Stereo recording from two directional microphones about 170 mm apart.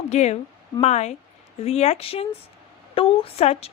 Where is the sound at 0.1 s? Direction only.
40° left (ahead or behind).